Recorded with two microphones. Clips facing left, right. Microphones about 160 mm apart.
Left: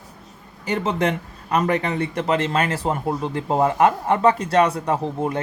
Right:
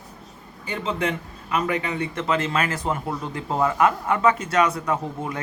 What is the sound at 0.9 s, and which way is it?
A man's voice, 35° left (ahead or behind).